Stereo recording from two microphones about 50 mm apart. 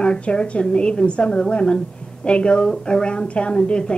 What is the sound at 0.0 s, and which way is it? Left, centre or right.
A woman's voice, centre.